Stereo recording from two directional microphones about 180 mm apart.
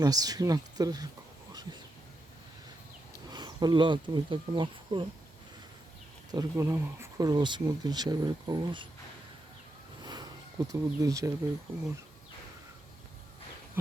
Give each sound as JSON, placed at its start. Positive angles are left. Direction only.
{"t": 0.0, "sound": "speech", "side_deg": -20}
{"t": 3.2, "sound": "speech", "side_deg": -20}
{"t": 6.3, "sound": "speech", "side_deg": -15}
{"t": 10.0, "sound": "a sound", "side_deg": -20}